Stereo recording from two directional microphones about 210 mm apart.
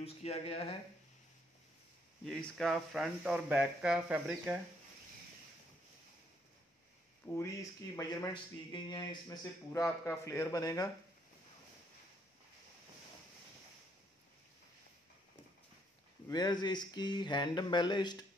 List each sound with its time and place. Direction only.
0.0 s speech: 30° left (ahead or behind)
2.2 s speech: centre (ahead or behind)
7.2 s a man's voice: 10° left (ahead or behind)
16.3 s speech: 20° left (ahead or behind)